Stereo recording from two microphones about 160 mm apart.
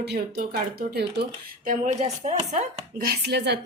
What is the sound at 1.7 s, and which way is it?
Speech, 45° right (ahead or behind).